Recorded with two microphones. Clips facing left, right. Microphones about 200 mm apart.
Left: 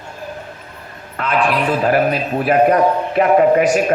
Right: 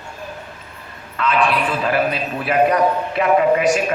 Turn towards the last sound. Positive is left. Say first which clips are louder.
# left 3 dB
turn(degrees=40)  # may be behind; listen again after turning